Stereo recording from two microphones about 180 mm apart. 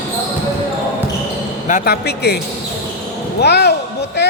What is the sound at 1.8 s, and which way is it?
Speech, 65° left (ahead or behind).